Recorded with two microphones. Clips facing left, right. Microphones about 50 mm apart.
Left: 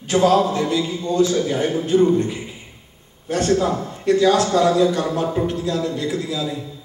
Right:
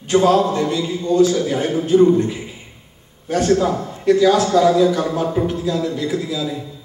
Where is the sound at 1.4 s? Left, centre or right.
Right.